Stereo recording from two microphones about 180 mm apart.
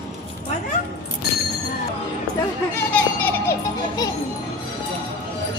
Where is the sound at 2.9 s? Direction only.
10° left (ahead or behind).